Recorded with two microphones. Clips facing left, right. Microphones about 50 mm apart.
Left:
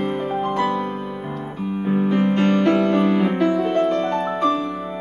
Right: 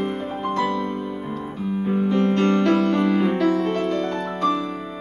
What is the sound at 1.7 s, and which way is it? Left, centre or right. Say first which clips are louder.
Music: left 1 dB; centre.